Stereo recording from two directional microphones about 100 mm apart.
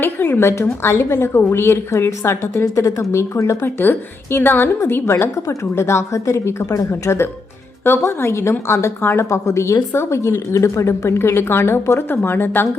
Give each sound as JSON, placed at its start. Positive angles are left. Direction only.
{"t": 0.0, "sound": "a woman's voice", "side_deg": 20}